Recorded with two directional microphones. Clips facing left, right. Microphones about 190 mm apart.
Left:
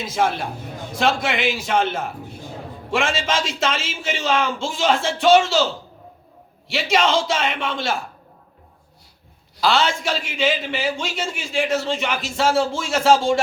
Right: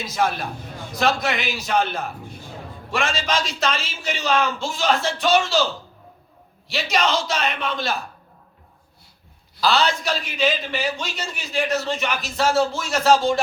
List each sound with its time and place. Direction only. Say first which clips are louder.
0.0 s a man's voice: left 2 dB; 25° left (ahead or behind)
6.7 s a man's voice: left 3 dB; 25° left (ahead or behind)
9.6 s a man's voice: left 1 dB; 25° left (ahead or behind)